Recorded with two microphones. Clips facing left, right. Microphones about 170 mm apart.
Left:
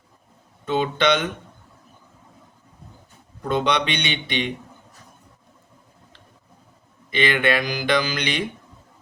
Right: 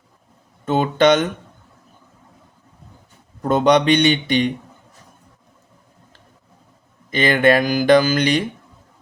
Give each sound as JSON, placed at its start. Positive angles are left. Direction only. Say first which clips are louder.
{"t": 0.6, "sound": "speech", "louder": "right 5 dB", "side_deg": -50}
{"t": 3.4, "sound": "speech", "louder": "right 7 dB", "side_deg": -45}
{"t": 7.1, "sound": "speech", "louder": "right 6 dB", "side_deg": -40}